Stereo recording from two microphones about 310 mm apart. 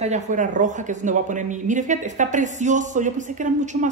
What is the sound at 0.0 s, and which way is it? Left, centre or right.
Speech, right.